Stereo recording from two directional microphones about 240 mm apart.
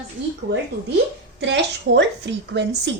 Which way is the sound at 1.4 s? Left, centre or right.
Right.